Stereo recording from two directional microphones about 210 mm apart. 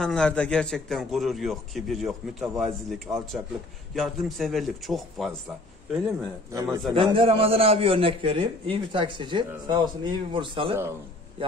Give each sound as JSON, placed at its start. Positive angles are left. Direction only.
{"t": 0.0, "sound": "a man's voice", "side_deg": 5}
{"t": 6.5, "sound": "a man's voice", "side_deg": -15}